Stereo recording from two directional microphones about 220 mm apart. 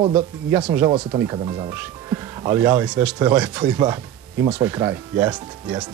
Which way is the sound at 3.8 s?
15° right (ahead or behind).